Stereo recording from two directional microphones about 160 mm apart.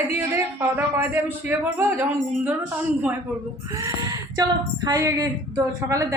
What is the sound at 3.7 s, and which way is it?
Speech, 20° right (ahead or behind).